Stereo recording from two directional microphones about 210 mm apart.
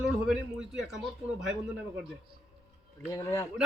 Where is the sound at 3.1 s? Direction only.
15° left (ahead or behind).